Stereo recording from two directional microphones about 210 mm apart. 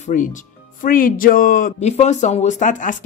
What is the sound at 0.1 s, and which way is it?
Speech, 40° left (ahead or behind).